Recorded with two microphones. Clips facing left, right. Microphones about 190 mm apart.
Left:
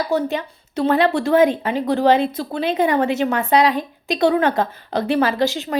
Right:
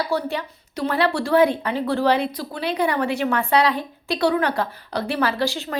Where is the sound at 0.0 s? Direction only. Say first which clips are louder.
Left 3 dB; 20° left (ahead or behind).